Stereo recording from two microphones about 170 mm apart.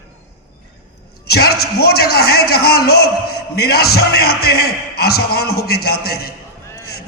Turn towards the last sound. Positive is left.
turn(degrees=65)  # may be behind; listen again after turning